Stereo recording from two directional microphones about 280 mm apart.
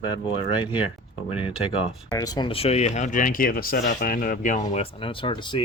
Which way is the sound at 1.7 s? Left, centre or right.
Centre.